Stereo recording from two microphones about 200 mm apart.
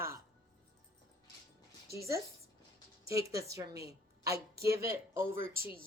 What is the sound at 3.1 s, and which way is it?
Speech, 15° right (ahead or behind).